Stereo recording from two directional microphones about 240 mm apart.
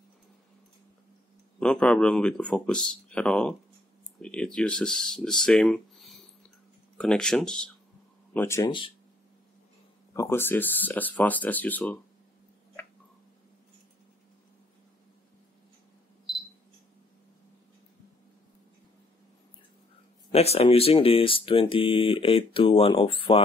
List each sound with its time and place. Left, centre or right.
1.6 s speech: centre
10.1 s speech: centre
20.2 s speech: left